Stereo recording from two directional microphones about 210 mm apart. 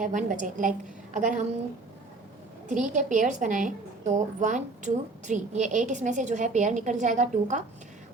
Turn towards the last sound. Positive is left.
turn(degrees=-35)  # may be behind; listen again after turning